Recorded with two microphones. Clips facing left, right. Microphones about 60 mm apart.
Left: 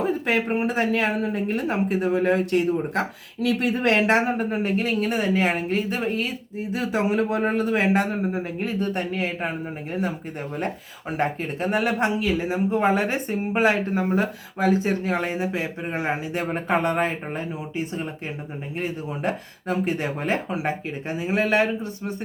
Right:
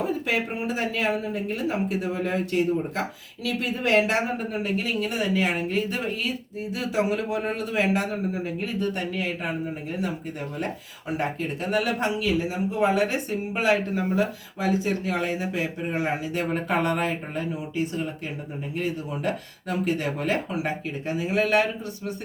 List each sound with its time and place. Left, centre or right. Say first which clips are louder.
0.0 s a man's voice: left 3 dB; left
11.2 s speech: left 5 dB; left
12.5 s speech: left 2 dB; left